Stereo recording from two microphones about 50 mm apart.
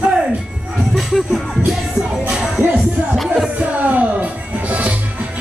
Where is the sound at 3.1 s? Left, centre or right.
Centre.